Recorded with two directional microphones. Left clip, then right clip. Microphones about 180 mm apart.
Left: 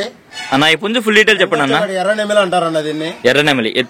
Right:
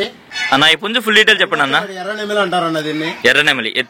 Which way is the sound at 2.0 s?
25° left (ahead or behind).